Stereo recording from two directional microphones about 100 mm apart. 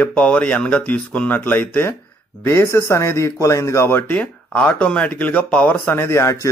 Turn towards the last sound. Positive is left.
turn(degrees=30)  # may be behind; listen again after turning